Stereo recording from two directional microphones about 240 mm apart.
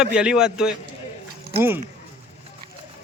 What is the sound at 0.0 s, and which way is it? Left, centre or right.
Speech, centre.